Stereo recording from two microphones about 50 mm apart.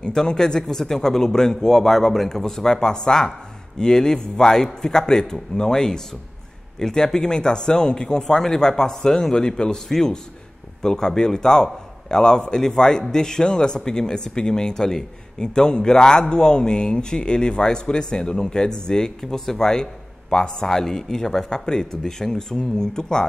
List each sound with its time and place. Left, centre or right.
0.0 s speech: centre